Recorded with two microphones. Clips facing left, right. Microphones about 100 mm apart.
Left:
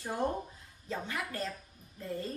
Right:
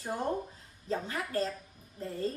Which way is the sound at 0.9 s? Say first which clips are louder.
Right 3 dB; 35° right (ahead or behind).